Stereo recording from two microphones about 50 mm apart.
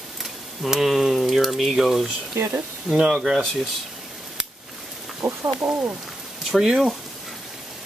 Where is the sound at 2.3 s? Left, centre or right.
Right.